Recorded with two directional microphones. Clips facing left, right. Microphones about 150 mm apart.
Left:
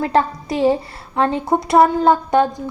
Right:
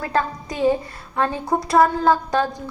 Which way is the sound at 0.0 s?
25° left (ahead or behind).